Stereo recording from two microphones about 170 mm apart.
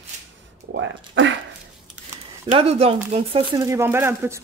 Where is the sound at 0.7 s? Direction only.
90° right.